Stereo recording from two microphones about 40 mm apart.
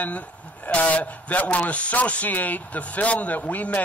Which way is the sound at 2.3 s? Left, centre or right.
Left.